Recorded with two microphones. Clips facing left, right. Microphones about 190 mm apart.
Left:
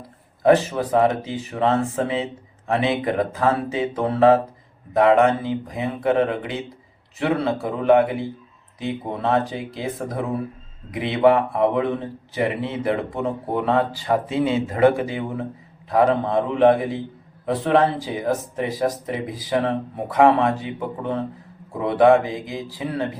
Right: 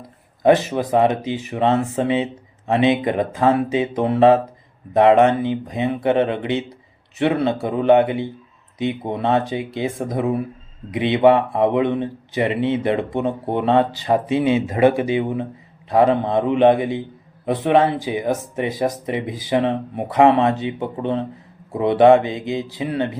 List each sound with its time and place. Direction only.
0.4 s speech: 20° right (ahead or behind)